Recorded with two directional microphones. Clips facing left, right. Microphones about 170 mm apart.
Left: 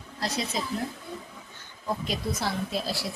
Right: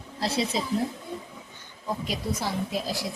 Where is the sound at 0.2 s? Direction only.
30° right (ahead or behind).